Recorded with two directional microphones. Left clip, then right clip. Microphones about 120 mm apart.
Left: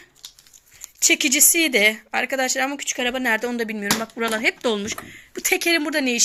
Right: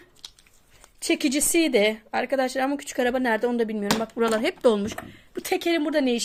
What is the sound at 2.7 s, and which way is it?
A woman's voice, 55° right (ahead or behind).